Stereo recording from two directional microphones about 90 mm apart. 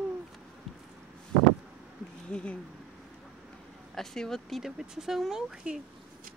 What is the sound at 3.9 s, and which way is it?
Speech, 5° left (ahead or behind).